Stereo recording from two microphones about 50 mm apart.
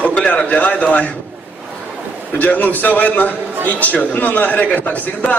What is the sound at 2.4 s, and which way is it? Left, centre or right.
A man's voice, left.